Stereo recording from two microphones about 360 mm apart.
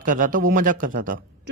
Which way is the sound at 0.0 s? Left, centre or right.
Right.